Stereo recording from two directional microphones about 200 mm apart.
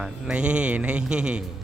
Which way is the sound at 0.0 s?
5° right (ahead or behind).